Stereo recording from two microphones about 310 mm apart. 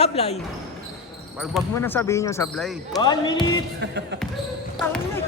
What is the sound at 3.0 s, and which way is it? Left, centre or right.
Speech, centre.